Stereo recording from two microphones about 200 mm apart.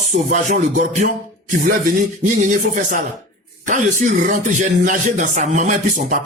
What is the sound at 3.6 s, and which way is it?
Speech, 40° right (ahead or behind).